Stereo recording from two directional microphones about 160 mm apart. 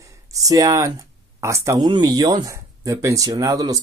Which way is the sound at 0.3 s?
20° right (ahead or behind).